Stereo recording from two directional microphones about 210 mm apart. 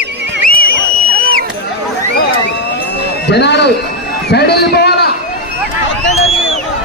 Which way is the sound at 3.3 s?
55° left (ahead or behind).